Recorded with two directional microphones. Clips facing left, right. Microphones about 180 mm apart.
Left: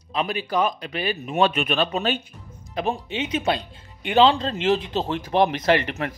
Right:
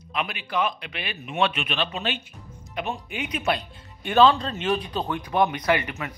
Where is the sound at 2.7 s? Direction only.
30° left (ahead or behind).